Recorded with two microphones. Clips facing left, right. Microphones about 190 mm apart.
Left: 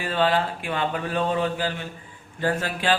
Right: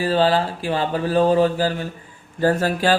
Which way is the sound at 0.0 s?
35° right (ahead or behind).